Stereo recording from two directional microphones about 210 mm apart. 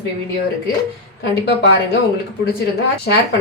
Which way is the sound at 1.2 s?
50° left (ahead or behind).